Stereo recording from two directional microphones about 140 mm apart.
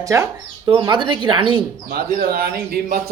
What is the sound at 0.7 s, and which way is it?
Speech, 35° right (ahead or behind).